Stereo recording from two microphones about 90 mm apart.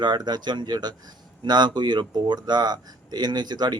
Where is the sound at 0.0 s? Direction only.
55° right (ahead or behind).